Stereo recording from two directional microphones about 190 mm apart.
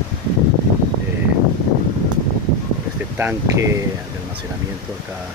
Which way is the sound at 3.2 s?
15° right (ahead or behind).